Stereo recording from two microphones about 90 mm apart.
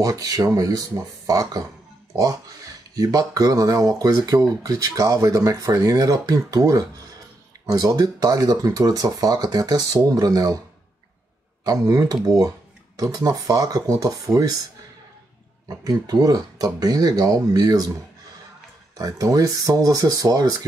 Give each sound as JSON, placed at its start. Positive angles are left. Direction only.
{"t": 0.0, "sound": "speech", "side_deg": -45}
{"t": 3.0, "sound": "speech", "side_deg": -40}
{"t": 11.6, "sound": "speech", "side_deg": -40}
{"t": 15.7, "sound": "speech", "side_deg": -40}
{"t": 18.9, "sound": "speech", "side_deg": -40}